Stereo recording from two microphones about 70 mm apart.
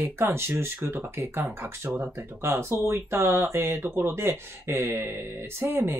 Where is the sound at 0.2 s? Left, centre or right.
Right.